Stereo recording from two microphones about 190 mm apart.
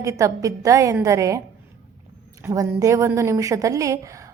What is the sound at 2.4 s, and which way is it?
A woman's voice, 15° right (ahead or behind).